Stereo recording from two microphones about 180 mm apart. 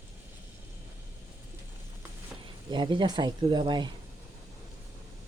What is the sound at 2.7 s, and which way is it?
Speech, 25° right (ahead or behind).